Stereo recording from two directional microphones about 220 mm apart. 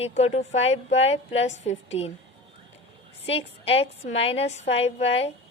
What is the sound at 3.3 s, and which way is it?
A woman's voice, 25° left (ahead or behind).